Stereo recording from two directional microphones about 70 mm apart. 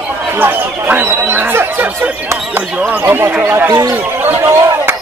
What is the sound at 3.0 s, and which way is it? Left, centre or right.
Speech, right.